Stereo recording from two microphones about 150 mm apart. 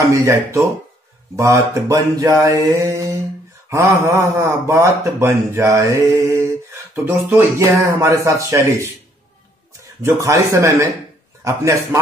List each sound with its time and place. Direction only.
0.1 s mantra: 20° right (ahead or behind)
3.7 s speech: 15° right (ahead or behind)
7.1 s mantra: 15° right (ahead or behind)
10.0 s mantra: 20° right (ahead or behind)